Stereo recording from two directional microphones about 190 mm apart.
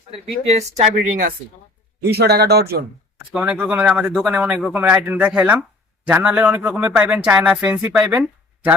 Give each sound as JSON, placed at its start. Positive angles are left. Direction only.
{"t": 0.4, "sound": "speech", "side_deg": -35}
{"t": 2.0, "sound": "speech", "side_deg": -60}
{"t": 3.3, "sound": "speech", "side_deg": -5}